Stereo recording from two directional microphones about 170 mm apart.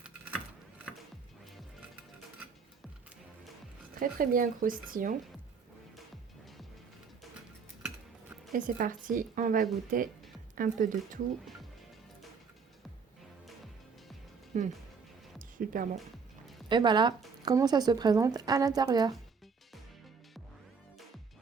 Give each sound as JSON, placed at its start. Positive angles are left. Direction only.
{"t": 4.0, "sound": "speech", "side_deg": -55}
{"t": 8.5, "sound": "speech", "side_deg": -50}
{"t": 14.5, "sound": "speech", "side_deg": -45}
{"t": 15.4, "sound": "music", "side_deg": -55}
{"t": 16.6, "sound": "speech", "side_deg": -25}